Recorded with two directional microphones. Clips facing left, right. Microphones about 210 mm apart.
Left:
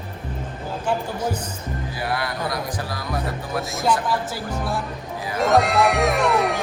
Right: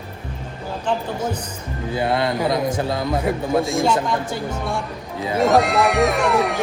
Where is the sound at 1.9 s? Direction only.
25° right (ahead or behind).